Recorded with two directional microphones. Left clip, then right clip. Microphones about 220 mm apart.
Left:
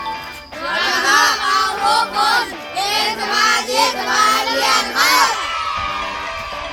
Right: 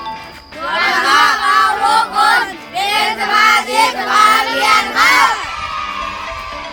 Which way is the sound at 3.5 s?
Centre (ahead or behind).